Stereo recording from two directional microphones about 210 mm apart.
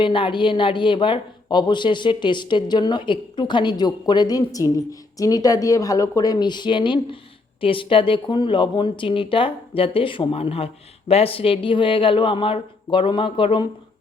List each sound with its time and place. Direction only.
0.0 s a man's voice: 25° left (ahead or behind)